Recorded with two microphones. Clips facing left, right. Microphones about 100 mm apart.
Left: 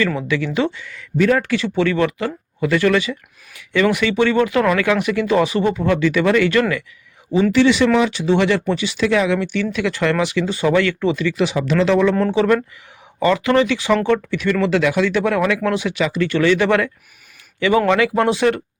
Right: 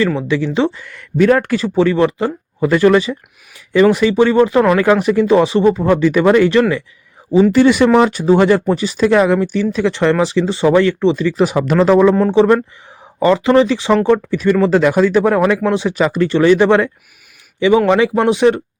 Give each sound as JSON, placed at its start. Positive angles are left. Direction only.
{"t": 0.2, "sound": "speech", "side_deg": -30}
{"t": 0.7, "sound": "speech", "side_deg": -50}
{"t": 7.5, "sound": "speech", "side_deg": -45}